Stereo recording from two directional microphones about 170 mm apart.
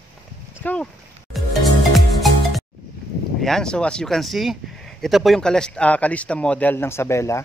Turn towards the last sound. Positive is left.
turn(degrees=15)  # may be behind; listen again after turning